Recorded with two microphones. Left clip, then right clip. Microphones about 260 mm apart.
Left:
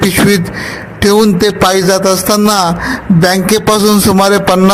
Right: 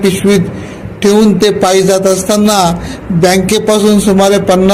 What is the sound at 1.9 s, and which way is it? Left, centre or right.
Music, left.